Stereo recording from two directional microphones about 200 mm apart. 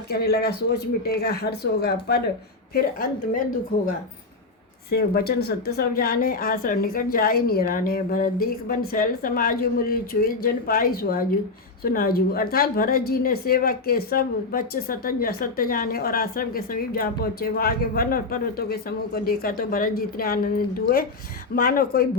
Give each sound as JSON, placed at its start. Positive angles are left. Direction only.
{"t": 0.1, "sound": "a woman's voice", "side_deg": 50}
{"t": 4.9, "sound": "a woman's voice", "side_deg": 50}